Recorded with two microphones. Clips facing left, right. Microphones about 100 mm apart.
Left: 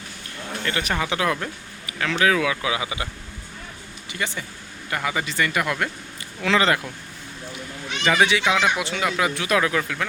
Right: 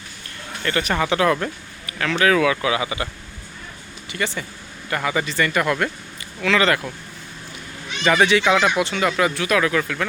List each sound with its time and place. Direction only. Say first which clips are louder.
0.6 s speech: right 4 dB; 10° left (ahead or behind)
4.1 s speech: right 3 dB; 15° left (ahead or behind)
6.4 s speech: right 1 dB; 25° left (ahead or behind)
8.0 s speech: right 3 dB; 5° left (ahead or behind)
9.3 s speech: right 2 dB; 20° left (ahead or behind)